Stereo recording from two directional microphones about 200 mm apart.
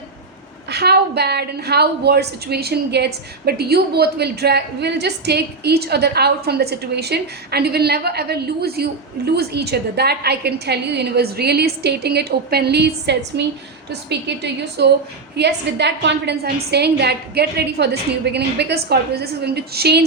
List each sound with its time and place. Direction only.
0.7 s a woman's voice: 55° right (ahead or behind)